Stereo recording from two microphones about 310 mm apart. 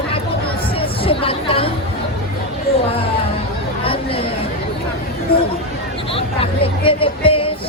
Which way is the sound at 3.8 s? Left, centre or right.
Centre.